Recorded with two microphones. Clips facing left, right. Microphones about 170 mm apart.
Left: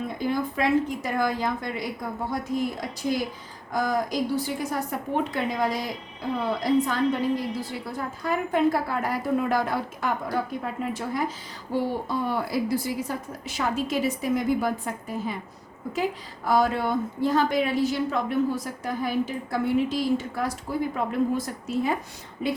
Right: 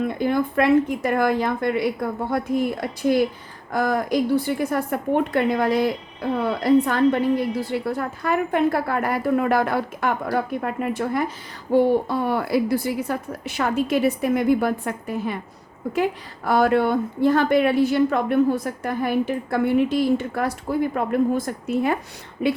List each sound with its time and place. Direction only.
0.0 s a woman's voice: 60° right (ahead or behind)